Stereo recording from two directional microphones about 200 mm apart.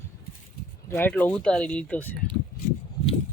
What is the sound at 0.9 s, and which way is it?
Speech, 10° left (ahead or behind).